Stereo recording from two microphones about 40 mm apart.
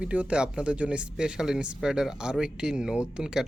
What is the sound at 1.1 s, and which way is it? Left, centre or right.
Speech, centre.